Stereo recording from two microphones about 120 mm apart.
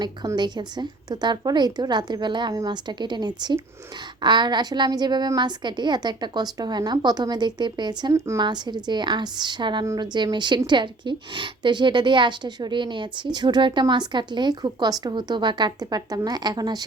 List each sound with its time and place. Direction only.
0.3 s a woman's voice: 35° right (ahead or behind)